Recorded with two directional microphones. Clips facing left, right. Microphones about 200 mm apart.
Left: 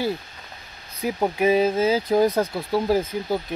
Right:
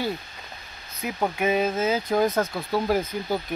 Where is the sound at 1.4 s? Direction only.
30° left (ahead or behind).